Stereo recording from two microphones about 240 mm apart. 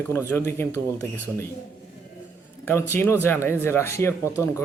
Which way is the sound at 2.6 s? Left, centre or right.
Centre.